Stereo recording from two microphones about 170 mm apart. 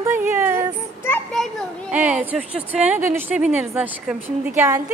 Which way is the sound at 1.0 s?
10° left (ahead or behind).